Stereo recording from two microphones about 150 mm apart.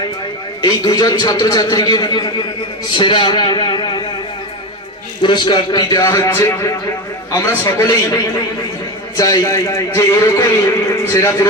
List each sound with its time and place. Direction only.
0.6 s a man's voice: 25° left (ahead or behind)
5.2 s a man's voice: 30° left (ahead or behind)